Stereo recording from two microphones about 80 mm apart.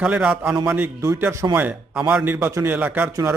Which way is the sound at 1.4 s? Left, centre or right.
Right.